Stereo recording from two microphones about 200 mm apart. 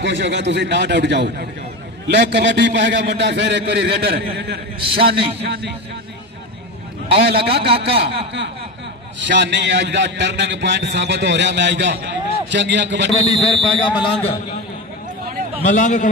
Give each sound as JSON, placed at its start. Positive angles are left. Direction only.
{"t": 0.0, "sound": "a man's voice", "side_deg": -60}
{"t": 7.4, "sound": "a man's voice", "side_deg": -30}
{"t": 9.2, "sound": "a man's voice", "side_deg": -60}
{"t": 13.4, "sound": "speech", "side_deg": 30}
{"t": 15.6, "sound": "a man's voice", "side_deg": 40}